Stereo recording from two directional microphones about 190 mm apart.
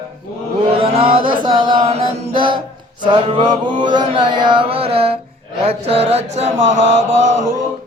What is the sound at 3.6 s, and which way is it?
Mantra, 25° right (ahead or behind).